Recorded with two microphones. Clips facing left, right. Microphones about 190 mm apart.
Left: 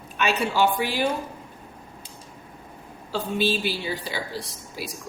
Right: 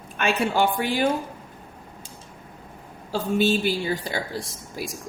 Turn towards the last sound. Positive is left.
turn(degrees=-50)  # may be behind; listen again after turning